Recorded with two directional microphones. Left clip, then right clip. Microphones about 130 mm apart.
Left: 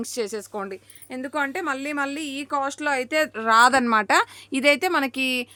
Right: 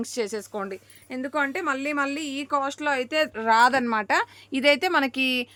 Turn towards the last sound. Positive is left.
turn(degrees=5)  # may be behind; listen again after turning